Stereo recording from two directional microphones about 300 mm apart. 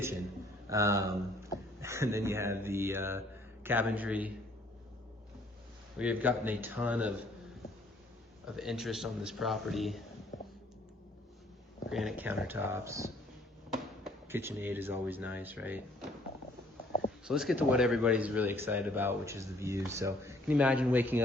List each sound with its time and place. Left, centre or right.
0.7 s speech: centre
6.0 s speech: centre
8.5 s speech: centre
11.9 s speech: centre
17.2 s speech: centre